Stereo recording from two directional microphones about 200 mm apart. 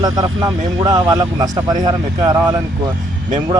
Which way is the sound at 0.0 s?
20° right (ahead or behind).